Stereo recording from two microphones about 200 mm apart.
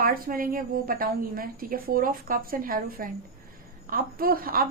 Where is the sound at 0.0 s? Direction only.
45° right (ahead or behind).